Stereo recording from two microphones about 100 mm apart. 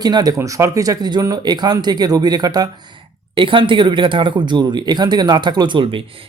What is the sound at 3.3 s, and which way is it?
Speech, 55° right (ahead or behind).